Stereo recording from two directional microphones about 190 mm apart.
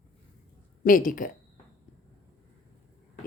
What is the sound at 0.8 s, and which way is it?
Speech, 45° left (ahead or behind).